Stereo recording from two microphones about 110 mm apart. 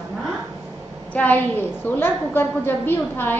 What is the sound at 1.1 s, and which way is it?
A woman's voice, 15° left (ahead or behind).